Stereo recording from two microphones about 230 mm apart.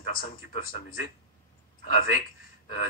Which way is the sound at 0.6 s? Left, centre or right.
Left.